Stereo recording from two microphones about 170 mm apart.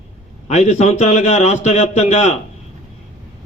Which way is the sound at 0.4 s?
40° left (ahead or behind).